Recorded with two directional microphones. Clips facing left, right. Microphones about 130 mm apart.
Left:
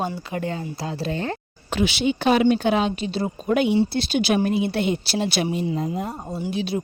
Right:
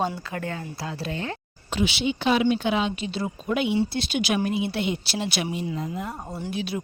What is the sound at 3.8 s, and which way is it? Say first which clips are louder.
A woman's voice: left 4 dB; 35° left (ahead or behind).